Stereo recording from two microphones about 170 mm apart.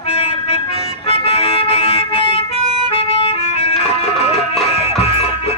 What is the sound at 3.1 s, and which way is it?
Music, 35° left (ahead or behind).